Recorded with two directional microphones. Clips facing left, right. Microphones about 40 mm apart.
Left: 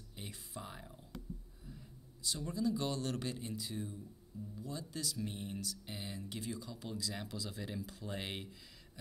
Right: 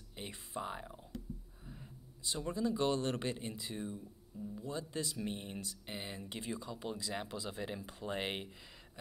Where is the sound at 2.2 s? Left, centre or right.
Right.